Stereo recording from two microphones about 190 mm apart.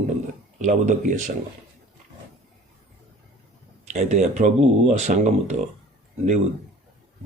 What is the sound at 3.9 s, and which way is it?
Speech, 35° right (ahead or behind).